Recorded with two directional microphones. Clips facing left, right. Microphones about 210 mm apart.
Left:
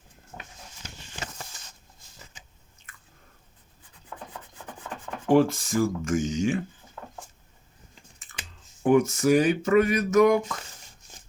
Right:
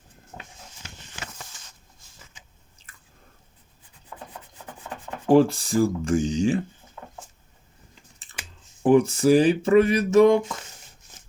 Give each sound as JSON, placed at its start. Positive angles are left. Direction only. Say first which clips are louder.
{"t": 5.3, "sound": "speech", "louder": "right 3 dB", "side_deg": -35}
{"t": 8.8, "sound": "speech", "louder": "right 3 dB", "side_deg": -30}